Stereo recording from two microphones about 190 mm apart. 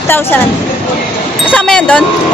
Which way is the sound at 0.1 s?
10° left (ahead or behind).